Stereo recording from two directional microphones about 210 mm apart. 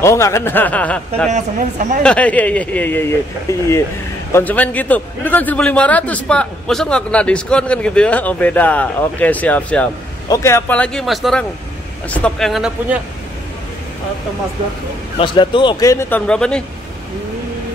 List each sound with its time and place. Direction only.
0.0 s a man's voice: 15° left (ahead or behind)
1.3 s a woman's voice: 35° right (ahead or behind)
2.0 s a man's voice: 5° left (ahead or behind)
15.1 s a man's voice: 25° left (ahead or behind); by 16.6 s 5° left (ahead or behind)